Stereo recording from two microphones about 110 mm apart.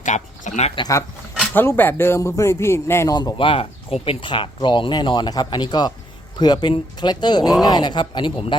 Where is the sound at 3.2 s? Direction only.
45° left (ahead or behind).